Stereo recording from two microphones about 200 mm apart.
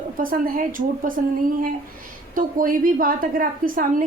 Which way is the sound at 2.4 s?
45° right (ahead or behind).